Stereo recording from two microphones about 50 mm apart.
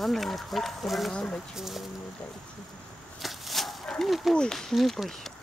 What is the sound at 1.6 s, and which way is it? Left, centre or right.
Speech, centre.